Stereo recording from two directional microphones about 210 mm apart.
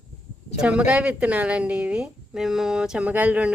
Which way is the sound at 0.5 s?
5° right (ahead or behind).